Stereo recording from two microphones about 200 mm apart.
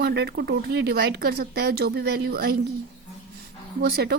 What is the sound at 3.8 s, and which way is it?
Speech, 55° right (ahead or behind).